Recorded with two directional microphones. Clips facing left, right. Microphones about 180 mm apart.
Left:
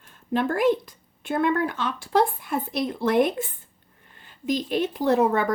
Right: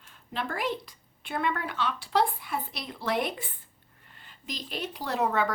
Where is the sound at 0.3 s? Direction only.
50° left (ahead or behind).